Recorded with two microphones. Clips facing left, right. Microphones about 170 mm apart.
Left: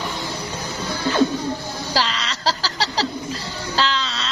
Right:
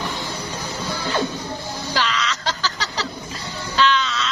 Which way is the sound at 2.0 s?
35° left (ahead or behind).